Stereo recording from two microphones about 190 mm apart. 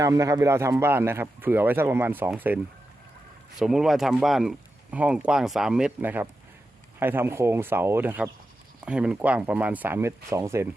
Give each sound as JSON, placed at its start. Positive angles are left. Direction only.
{"t": 0.0, "sound": "speech", "side_deg": -15}
{"t": 3.6, "sound": "speech", "side_deg": 0}